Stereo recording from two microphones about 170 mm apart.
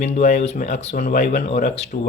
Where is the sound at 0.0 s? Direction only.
40° left (ahead or behind).